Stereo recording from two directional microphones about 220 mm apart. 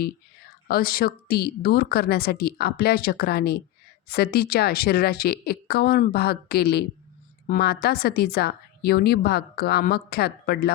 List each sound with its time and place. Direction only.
0.7 s a woman's voice: 40° left (ahead or behind)